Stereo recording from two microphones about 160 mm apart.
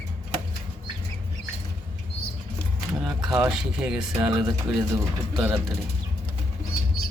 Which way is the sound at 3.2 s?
25° right (ahead or behind).